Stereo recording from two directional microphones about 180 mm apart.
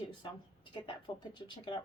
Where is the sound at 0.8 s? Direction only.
25° left (ahead or behind).